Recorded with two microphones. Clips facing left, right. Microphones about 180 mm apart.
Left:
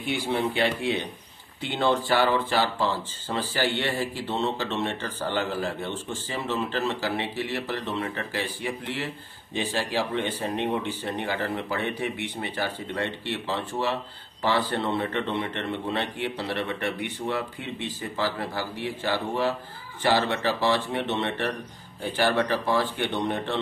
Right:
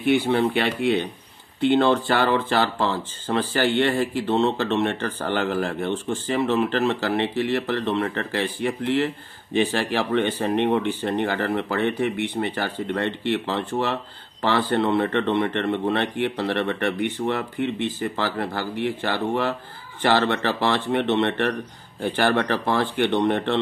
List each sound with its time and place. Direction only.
0.0 s speech: 60° right (ahead or behind)